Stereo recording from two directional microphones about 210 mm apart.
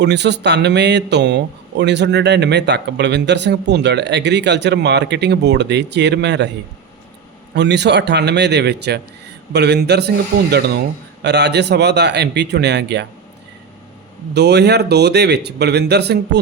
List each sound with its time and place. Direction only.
0.0 s a man's voice: 55° right (ahead or behind)
7.5 s a man's voice: 55° right (ahead or behind)
14.3 s a man's voice: 55° right (ahead or behind)